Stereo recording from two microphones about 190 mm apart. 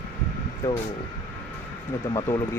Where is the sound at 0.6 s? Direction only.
15° left (ahead or behind).